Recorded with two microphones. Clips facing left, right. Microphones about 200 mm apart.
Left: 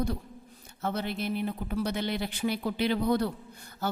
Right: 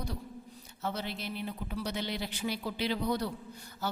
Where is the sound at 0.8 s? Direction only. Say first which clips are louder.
Left 5 dB; 55° left (ahead or behind).